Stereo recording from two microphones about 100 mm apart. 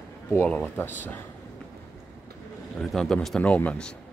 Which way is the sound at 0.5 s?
20° left (ahead or behind).